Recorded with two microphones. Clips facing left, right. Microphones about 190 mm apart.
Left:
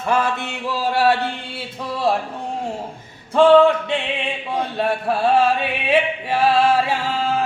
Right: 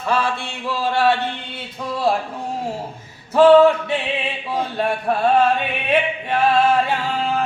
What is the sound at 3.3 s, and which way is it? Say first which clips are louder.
Music: right 1 dB; 5° right (ahead or behind).